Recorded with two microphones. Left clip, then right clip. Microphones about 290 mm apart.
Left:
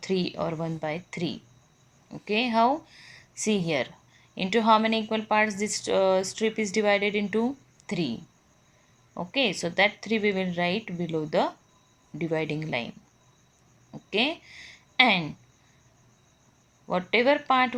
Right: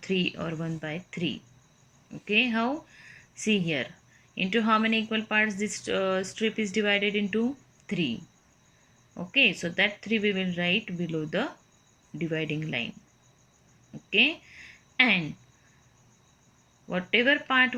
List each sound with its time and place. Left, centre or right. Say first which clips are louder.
0.0 s a woman's voice: left 1 dB; centre
9.1 s a woman's voice: right 3 dB; centre
14.1 s a sound: right 3 dB; centre
16.9 s speech: left 1 dB; centre